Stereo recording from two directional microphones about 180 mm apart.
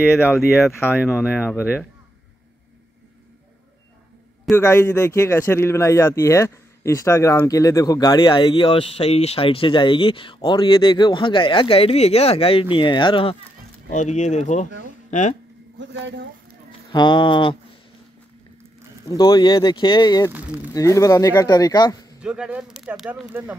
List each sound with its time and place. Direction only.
0.0 s speech: 10° left (ahead or behind)
4.5 s a man's voice: 15° left (ahead or behind)
13.9 s speech: 40° left (ahead or behind)
16.9 s a man's voice: 25° left (ahead or behind)
19.0 s a man's voice: 20° left (ahead or behind)
20.3 s speech: 10° right (ahead or behind)
20.7 s a man's voice: 20° left (ahead or behind)
22.2 s speech: 5° right (ahead or behind)